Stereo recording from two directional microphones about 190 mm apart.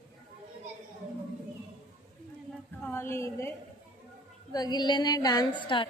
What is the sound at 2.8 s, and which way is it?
A woman's voice, 10° left (ahead or behind).